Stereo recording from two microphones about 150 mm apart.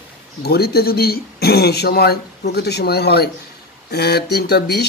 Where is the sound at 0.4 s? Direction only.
90° left.